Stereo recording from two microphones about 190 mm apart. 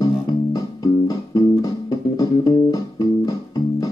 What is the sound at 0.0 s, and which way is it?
Music, 20° left (ahead or behind).